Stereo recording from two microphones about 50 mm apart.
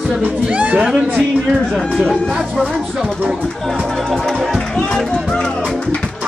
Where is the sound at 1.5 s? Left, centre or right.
Centre.